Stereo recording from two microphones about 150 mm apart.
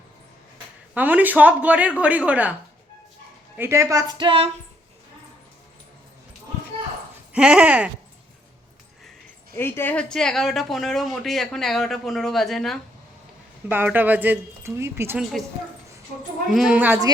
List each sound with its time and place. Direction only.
0.9 s speech: 10° right (ahead or behind)
3.6 s speech: 20° right (ahead or behind); by 4.5 s 40° right (ahead or behind)
7.3 s speech: 10° right (ahead or behind)
9.6 s speech: 15° left (ahead or behind)
13.7 s speech: 15° right (ahead or behind)
15.2 s speech: centre (ahead or behind)
16.5 s speech: 5° right (ahead or behind)